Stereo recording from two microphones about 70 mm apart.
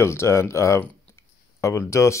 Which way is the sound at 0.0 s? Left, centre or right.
Left.